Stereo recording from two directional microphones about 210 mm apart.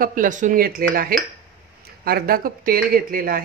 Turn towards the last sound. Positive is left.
turn(degrees=-45)  # may be behind; listen again after turning